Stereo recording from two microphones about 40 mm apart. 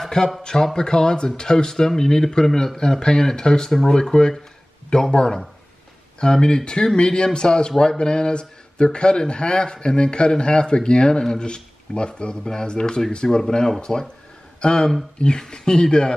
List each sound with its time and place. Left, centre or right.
0.0 s a man's voice: centre